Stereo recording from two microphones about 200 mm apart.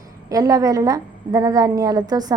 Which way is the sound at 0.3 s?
15° right (ahead or behind).